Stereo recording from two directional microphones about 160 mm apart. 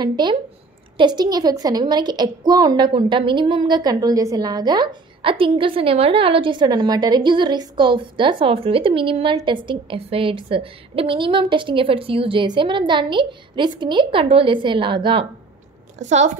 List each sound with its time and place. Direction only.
0.0 s a woman's voice: 25° right (ahead or behind)
16.0 s speech: 45° right (ahead or behind)